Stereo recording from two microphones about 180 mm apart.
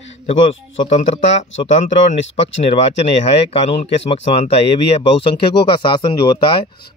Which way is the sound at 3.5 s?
35° left (ahead or behind).